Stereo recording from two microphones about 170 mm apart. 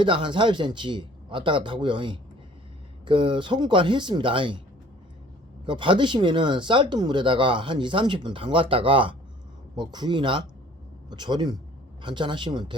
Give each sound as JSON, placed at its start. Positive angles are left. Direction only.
{"t": 0.0, "sound": "speech", "side_deg": -30}
{"t": 5.6, "sound": "speech", "side_deg": -30}